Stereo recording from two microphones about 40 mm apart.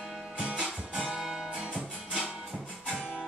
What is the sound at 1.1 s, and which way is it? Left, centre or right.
Guitar, centre.